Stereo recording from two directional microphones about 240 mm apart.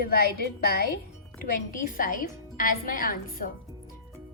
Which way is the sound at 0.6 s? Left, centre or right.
Left.